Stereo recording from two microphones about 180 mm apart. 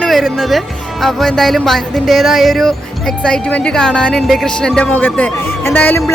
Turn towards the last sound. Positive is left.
turn(degrees=10)  # may be behind; listen again after turning